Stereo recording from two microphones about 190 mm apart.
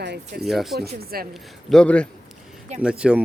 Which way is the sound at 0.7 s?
55° right (ahead or behind).